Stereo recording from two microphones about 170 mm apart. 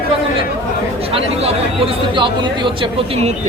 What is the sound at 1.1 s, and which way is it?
Speech, 35° right (ahead or behind).